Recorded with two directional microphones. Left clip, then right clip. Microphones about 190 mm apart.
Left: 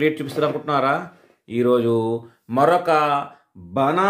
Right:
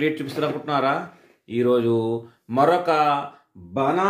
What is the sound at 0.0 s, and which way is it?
A man's voice, 25° left (ahead or behind).